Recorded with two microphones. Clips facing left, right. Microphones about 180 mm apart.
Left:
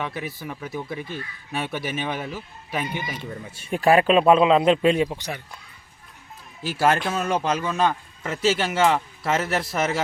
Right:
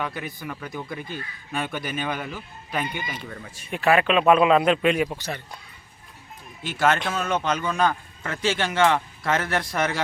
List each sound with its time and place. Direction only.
0.0 s a man's voice: centre (ahead or behind)
3.7 s speech: 35° left (ahead or behind)
5.0 s speech: 15° left (ahead or behind)
6.6 s a man's voice: 10° left (ahead or behind)